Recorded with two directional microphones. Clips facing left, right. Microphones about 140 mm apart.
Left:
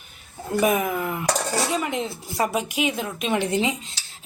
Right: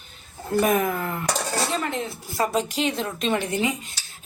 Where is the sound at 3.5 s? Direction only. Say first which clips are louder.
Left 1 dB; 20° left (ahead or behind).